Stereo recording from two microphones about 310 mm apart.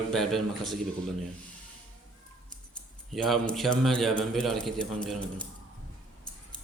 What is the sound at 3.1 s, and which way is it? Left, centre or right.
A man's voice, centre.